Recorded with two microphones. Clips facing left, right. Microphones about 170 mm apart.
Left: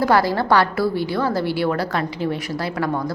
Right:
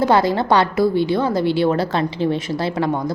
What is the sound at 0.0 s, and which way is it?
A woman's voice, 20° right (ahead or behind).